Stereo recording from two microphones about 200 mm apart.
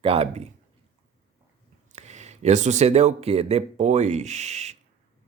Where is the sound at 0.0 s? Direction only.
30° right (ahead or behind).